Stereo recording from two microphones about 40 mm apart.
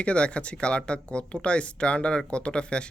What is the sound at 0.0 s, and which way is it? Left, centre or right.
Speech, left.